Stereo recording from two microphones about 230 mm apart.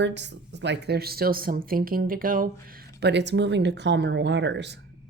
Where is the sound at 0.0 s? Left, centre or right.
Right.